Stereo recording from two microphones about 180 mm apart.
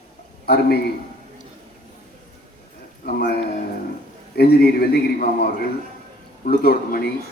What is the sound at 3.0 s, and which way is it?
Speech, 55° left (ahead or behind).